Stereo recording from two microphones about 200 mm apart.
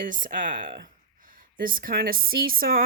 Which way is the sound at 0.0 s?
40° right (ahead or behind).